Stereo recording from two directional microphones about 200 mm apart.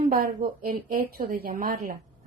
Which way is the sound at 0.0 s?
45° right (ahead or behind).